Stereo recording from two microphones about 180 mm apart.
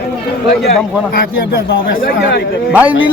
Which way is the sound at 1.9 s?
55° left (ahead or behind).